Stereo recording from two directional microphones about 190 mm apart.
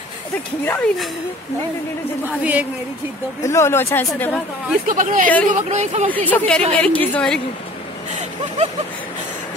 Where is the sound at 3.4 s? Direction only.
15° left (ahead or behind).